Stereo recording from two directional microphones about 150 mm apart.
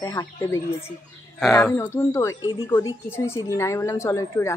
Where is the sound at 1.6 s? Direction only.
15° left (ahead or behind).